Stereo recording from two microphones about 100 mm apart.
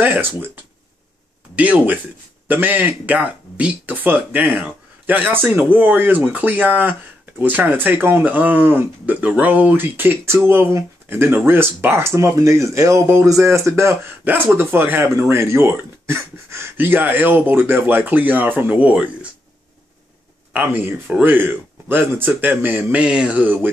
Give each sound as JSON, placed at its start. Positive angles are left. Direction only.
{"t": 0.0, "sound": "speech", "side_deg": -20}
{"t": 1.5, "sound": "speech", "side_deg": -15}
{"t": 20.5, "sound": "speech", "side_deg": -20}